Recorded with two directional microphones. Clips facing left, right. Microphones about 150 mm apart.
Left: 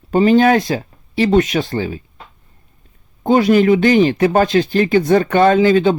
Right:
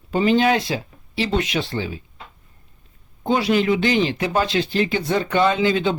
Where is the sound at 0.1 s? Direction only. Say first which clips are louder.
Left 6 dB; 45° left (ahead or behind).